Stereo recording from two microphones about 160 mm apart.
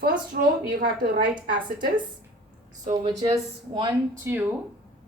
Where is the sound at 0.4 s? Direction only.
65° right (ahead or behind).